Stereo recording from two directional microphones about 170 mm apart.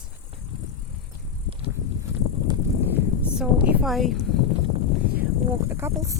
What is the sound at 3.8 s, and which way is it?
Speech, centre (ahead or behind).